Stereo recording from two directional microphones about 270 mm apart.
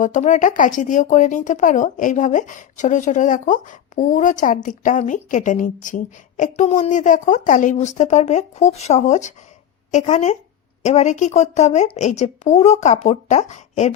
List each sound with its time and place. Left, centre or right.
0.0 s speech: left